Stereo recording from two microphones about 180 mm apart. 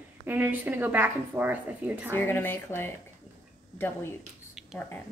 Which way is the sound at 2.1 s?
10° left (ahead or behind).